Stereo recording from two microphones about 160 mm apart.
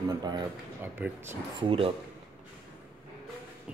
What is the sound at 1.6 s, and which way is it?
Speech, 35° right (ahead or behind).